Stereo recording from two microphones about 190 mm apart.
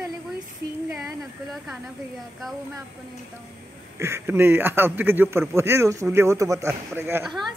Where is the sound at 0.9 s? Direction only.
Centre (ahead or behind).